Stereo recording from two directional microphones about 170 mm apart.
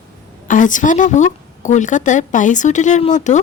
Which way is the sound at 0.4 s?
50° left (ahead or behind).